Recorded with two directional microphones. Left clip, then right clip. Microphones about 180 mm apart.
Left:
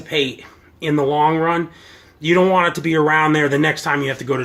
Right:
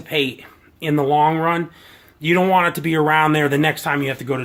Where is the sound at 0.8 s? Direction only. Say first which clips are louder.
Even; 45° right (ahead or behind).